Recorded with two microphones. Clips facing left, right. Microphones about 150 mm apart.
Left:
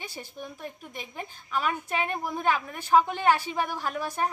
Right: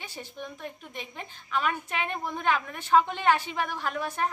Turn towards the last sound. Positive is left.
turn(degrees=10)  # may be behind; listen again after turning